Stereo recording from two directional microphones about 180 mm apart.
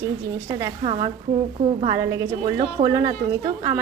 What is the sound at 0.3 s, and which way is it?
Speech, 15° right (ahead or behind).